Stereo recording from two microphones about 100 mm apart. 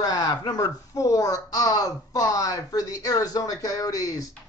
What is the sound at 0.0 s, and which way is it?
Speech, 40° left (ahead or behind).